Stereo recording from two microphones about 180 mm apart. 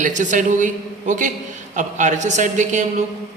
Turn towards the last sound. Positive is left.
turn(degrees=-40)  # may be behind; listen again after turning